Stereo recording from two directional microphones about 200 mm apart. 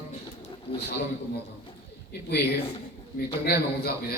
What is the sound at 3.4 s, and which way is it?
Speech, 50° left (ahead or behind).